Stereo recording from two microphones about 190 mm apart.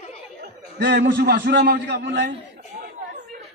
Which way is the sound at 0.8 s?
65° right (ahead or behind).